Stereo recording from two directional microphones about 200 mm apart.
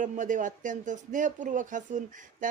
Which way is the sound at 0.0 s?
40° right (ahead or behind).